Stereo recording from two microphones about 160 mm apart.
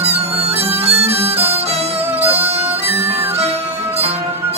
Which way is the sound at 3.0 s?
15° right (ahead or behind).